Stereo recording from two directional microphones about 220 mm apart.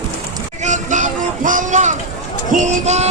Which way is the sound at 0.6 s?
35° right (ahead or behind).